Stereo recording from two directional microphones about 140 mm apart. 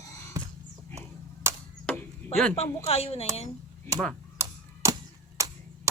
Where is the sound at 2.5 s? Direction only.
45° left (ahead or behind).